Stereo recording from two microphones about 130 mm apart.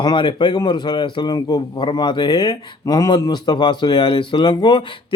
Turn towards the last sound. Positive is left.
turn(degrees=35)  # may be behind; listen again after turning